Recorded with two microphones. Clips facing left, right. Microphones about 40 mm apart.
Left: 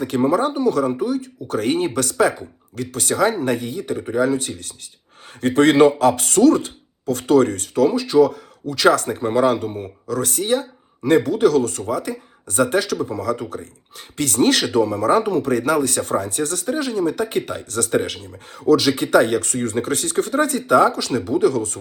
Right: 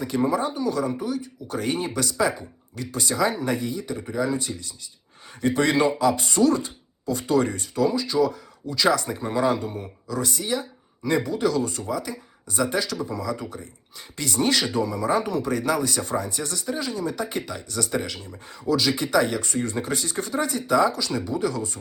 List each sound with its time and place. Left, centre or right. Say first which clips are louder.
0.3 s speech: left 6 dB; left
0.9 s speech: left 6 dB; centre
1.6 s speech: left 6 dB; left
7.9 s speech: left 7 dB; left
10.1 s speech: left 6 dB; left
12.0 s speech: left 6 dB; left
12.6 s speech: left 5 dB; left
15.7 s speech: left 5 dB; left
16.0 s speech: left 6 dB; left
18.8 s speech: left 6 dB; left